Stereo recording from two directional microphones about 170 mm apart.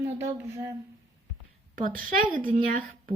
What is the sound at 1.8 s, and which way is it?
Speech, 55° right (ahead or behind).